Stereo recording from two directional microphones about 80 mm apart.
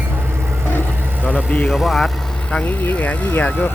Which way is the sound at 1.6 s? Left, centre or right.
Centre.